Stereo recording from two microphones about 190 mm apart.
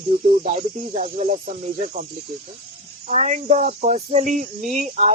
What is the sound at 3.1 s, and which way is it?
Speech, 40° right (ahead or behind).